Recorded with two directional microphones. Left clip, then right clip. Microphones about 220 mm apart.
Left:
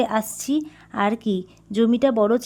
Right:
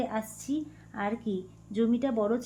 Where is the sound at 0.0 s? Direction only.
50° left (ahead or behind).